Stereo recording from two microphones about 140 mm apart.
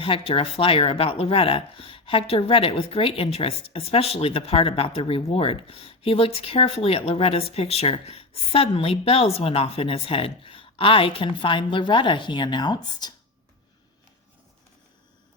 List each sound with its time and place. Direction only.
0.0 s speech: 40° left (ahead or behind)